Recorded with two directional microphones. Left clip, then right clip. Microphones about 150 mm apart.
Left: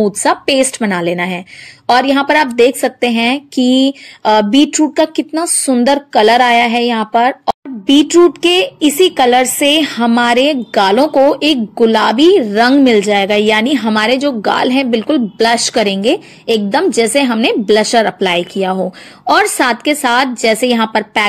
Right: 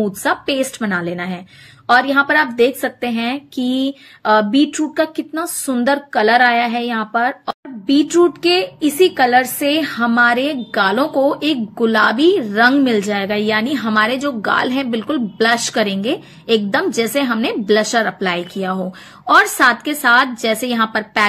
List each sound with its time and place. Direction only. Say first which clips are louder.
0.2 s a woman's voice: left 5 dB; 45° left (ahead or behind)